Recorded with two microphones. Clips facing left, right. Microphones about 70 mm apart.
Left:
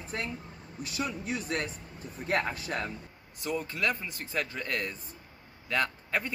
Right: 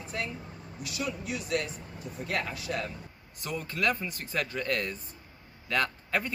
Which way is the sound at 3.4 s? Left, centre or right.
Centre.